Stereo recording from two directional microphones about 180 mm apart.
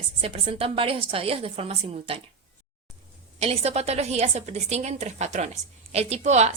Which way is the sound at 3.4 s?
35° right (ahead or behind).